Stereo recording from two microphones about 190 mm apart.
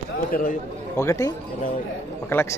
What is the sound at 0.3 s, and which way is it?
Speech, 45° left (ahead or behind).